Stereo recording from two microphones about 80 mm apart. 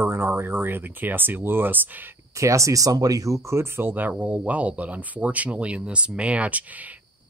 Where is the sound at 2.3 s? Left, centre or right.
Right; by 6.6 s centre.